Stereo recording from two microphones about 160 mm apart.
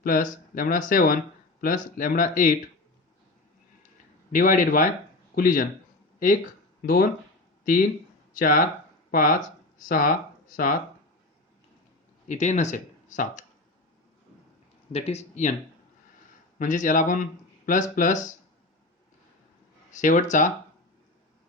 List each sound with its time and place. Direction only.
0.0 s speech: 55° left (ahead or behind)
4.3 s speech: 55° left (ahead or behind)
6.8 s speech: 65° left (ahead or behind)
12.3 s speech: 45° left (ahead or behind)
14.9 s speech: 40° left (ahead or behind)
16.6 s a man's voice: 50° left (ahead or behind)
19.9 s a man's voice: 50° left (ahead or behind)